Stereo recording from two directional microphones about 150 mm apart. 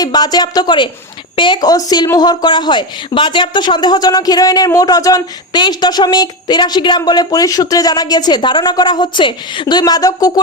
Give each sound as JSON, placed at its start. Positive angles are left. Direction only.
{"t": 0.0, "sound": "a woman's voice", "side_deg": 25}